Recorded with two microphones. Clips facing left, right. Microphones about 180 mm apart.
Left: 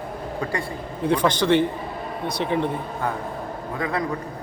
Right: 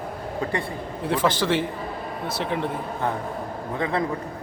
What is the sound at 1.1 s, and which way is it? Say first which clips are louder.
A man's voice: left 3 dB; 5° right (ahead or behind).